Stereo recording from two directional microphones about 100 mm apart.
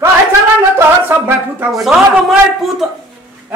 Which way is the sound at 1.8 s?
Centre (ahead or behind).